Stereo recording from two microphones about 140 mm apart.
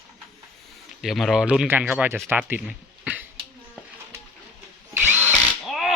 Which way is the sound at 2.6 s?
5° right (ahead or behind).